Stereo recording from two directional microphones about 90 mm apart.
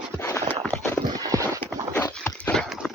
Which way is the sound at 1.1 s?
40° right (ahead or behind).